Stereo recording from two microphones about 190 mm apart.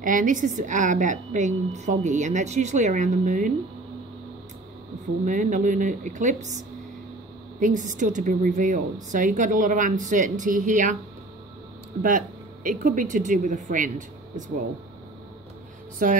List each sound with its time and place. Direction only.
0.0 s a woman's voice: 45° right (ahead or behind)
5.2 s a woman's voice: 40° right (ahead or behind)
7.6 s a woman's voice: 40° right (ahead or behind)
12.6 s speech: 45° right (ahead or behind)
16.0 s speech: 50° right (ahead or behind)